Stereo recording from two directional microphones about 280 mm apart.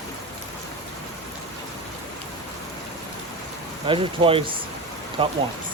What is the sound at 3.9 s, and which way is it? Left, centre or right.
Speech, centre.